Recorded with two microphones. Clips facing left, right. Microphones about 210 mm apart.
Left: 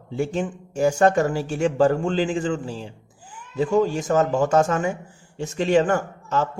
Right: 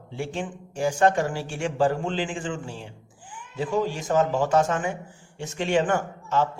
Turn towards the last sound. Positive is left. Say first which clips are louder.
# left 1 dB
turn(degrees=40)  # may be behind; listen again after turning